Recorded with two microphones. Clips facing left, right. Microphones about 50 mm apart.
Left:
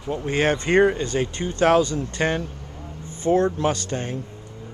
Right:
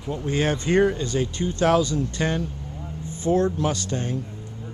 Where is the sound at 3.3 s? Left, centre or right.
Left.